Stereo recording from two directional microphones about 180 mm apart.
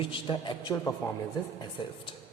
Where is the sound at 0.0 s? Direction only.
25° left (ahead or behind).